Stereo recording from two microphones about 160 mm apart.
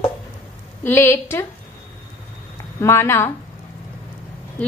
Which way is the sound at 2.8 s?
15° left (ahead or behind).